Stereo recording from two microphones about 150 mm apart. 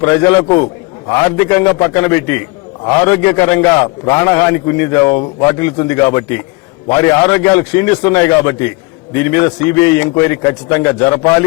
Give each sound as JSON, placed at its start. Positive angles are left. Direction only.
{"t": 0.0, "sound": "a man's voice", "side_deg": 15}